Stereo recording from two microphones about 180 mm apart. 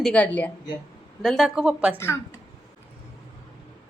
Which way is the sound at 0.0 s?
10° left (ahead or behind).